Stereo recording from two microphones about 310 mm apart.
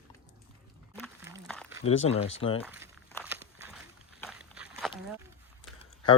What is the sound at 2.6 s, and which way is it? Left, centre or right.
Walk, centre.